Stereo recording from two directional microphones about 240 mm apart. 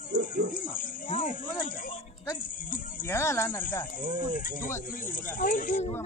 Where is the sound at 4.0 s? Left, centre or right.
Left.